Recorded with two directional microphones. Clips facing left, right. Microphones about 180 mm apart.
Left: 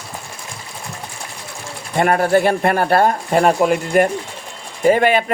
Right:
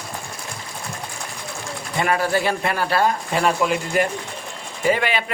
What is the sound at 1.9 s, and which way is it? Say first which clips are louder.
Speech: left 6 dB; 50° left (ahead or behind).